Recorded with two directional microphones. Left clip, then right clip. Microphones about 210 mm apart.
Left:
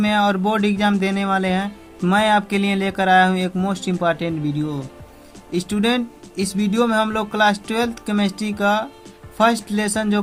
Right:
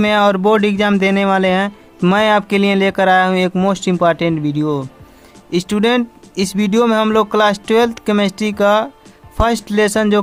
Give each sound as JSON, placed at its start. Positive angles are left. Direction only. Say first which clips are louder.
{"t": 0.0, "sound": "speech", "louder": "right 6 dB", "side_deg": -30}